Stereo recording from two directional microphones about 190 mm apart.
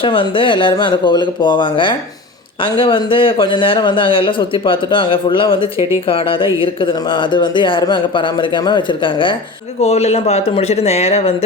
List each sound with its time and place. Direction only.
0.0 s speech: 25° left (ahead or behind)